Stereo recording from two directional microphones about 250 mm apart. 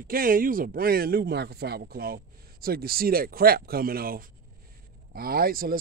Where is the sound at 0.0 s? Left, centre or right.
Right.